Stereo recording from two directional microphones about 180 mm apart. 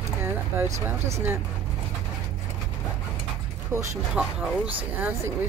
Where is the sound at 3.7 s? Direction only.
15° right (ahead or behind).